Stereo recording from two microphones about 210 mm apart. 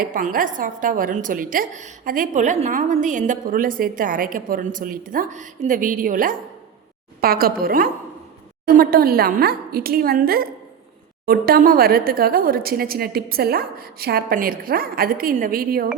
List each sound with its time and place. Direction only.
0.0 s a woman's voice: 40° right (ahead or behind)